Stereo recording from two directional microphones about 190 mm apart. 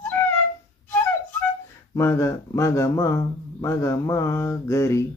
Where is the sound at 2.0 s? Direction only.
15° left (ahead or behind).